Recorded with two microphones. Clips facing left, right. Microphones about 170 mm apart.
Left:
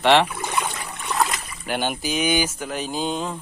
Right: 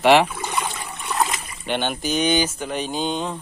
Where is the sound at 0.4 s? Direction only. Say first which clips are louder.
Even; 10° left (ahead or behind).